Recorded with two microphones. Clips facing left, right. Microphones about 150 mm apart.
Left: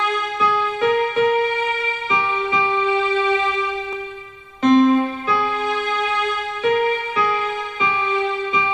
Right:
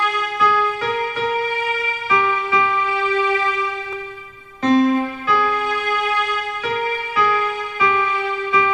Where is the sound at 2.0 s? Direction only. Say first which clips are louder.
Right 3 dB; 25° left (ahead or behind).